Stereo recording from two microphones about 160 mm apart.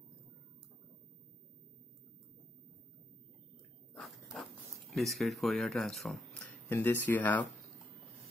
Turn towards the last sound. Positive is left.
turn(degrees=10)  # may be behind; listen again after turning